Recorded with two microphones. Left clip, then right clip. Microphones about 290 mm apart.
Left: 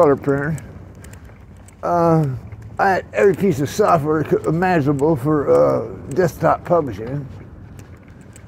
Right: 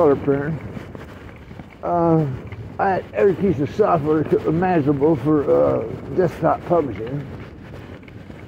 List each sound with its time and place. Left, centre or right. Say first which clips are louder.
0.0 s speech: left 2 dB; left
1.8 s speech: left 2 dB; left